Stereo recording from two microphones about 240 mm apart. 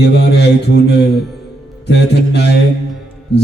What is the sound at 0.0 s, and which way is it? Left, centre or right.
A man's voice, left.